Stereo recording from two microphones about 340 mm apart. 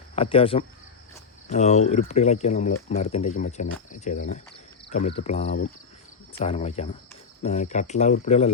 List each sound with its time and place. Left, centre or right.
0.2 s cricket: centre
1.5 s speech: centre
6.3 s cricket: centre
7.4 s speech: left